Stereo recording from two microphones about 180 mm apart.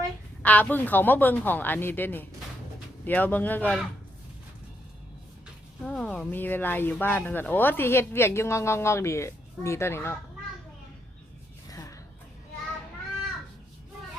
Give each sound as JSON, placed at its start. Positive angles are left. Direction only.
{"t": 0.4, "sound": "speech", "side_deg": 10}
{"t": 5.8, "sound": "speech", "side_deg": 5}
{"t": 11.7, "sound": "a sound", "side_deg": 20}